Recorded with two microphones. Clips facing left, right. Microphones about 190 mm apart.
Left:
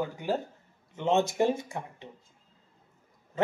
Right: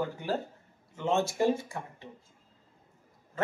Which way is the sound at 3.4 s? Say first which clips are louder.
Left 4 dB; 20° left (ahead or behind).